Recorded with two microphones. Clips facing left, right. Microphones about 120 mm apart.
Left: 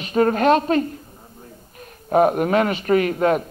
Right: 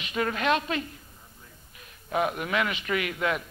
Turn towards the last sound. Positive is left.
turn(degrees=40)  # may be behind; listen again after turning